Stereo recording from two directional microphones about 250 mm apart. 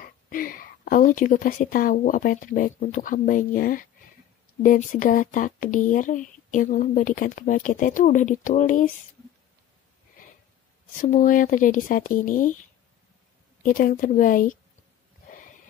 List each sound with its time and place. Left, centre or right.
0.0 s speech: left
11.0 s speech: left
13.6 s speech: left